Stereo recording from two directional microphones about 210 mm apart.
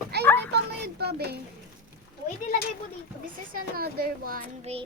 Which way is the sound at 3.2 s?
40° right (ahead or behind).